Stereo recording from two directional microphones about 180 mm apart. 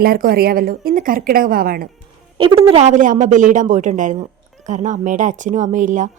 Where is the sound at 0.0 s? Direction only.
55° right (ahead or behind).